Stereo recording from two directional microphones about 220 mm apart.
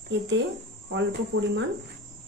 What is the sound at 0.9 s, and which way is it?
Cricket, 60° right (ahead or behind).